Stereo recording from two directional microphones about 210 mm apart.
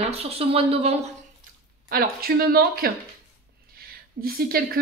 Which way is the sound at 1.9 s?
45° right (ahead or behind).